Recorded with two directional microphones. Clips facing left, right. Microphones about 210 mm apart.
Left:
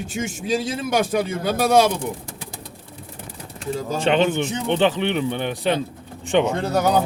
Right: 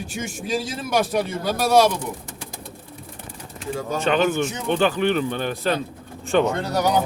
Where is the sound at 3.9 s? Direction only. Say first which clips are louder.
Left 1 dB; 25° left (ahead or behind).